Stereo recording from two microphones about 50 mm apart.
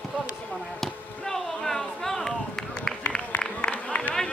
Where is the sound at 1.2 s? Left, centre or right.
Centre.